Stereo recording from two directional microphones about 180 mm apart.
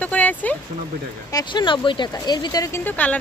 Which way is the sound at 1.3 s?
20° left (ahead or behind).